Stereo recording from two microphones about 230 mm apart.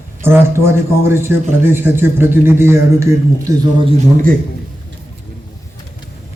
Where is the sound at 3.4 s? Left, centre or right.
Right.